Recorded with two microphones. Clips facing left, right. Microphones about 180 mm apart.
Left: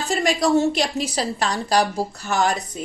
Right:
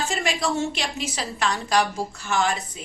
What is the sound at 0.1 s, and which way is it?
A woman's voice, 35° left (ahead or behind).